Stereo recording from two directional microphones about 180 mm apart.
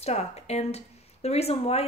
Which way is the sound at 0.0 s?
35° left (ahead or behind).